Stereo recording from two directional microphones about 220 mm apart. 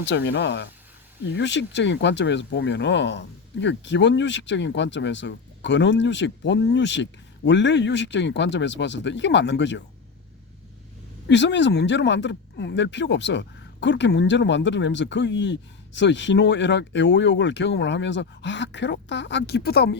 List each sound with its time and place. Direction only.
0.0 s speech: 55° left (ahead or behind)
11.3 s speech: 55° left (ahead or behind)